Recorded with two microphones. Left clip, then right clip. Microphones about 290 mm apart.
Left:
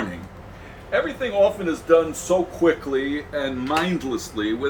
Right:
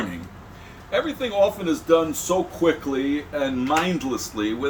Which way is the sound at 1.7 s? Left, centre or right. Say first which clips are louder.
Left 1 dB; right.